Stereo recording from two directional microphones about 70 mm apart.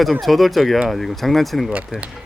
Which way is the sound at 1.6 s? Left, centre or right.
Centre.